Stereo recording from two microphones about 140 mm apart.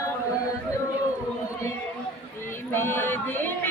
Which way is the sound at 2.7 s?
15° left (ahead or behind).